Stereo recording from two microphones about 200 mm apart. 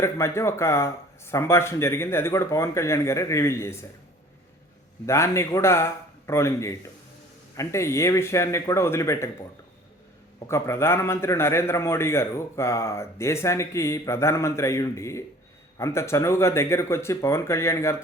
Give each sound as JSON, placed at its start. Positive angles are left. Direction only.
{"t": 0.0, "sound": "a man's voice", "side_deg": 15}
{"t": 5.0, "sound": "a man's voice", "side_deg": 15}
{"t": 10.4, "sound": "a man's voice", "side_deg": 15}